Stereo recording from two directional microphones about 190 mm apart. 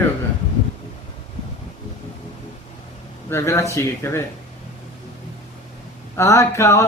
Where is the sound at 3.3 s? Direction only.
15° left (ahead or behind).